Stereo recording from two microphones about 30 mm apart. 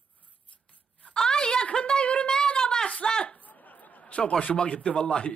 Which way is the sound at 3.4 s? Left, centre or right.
Left.